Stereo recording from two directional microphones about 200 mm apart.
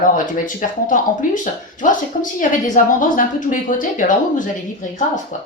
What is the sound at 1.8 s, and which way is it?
Speech, 40° left (ahead or behind).